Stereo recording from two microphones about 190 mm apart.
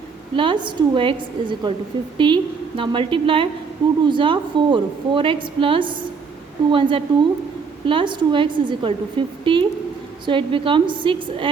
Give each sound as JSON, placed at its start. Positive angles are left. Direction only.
{"t": 0.3, "sound": "a woman's voice", "side_deg": -25}